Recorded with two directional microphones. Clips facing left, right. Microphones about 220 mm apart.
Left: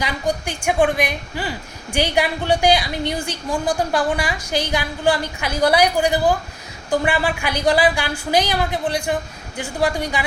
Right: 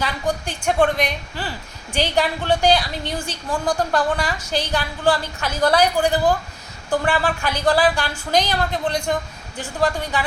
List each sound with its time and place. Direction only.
0.0 s a woman's voice: 15° left (ahead or behind)